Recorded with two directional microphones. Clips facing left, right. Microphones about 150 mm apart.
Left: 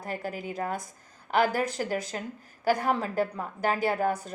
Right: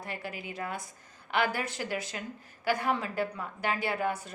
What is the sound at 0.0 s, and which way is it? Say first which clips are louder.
A woman's voice: left 5 dB; 40° left (ahead or behind).